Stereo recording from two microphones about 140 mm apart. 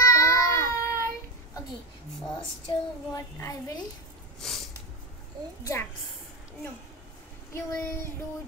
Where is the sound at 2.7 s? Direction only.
30° left (ahead or behind).